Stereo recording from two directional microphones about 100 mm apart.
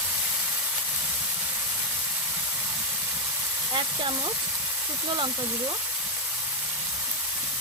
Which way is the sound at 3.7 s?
55° right (ahead or behind).